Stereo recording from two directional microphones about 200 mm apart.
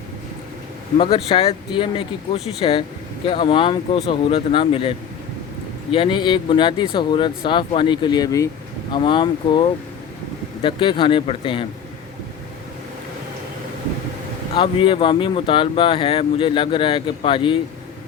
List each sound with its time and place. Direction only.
0.9 s speech: 30° left (ahead or behind)
14.5 s speech: 25° left (ahead or behind)